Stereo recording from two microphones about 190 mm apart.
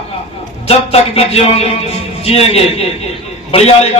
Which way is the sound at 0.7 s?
30° left (ahead or behind).